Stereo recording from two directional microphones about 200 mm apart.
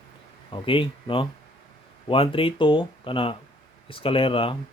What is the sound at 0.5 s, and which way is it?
Speech, 25° left (ahead or behind).